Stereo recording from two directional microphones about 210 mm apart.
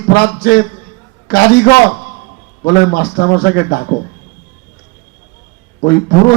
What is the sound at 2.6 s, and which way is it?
Speech, 50° left (ahead or behind).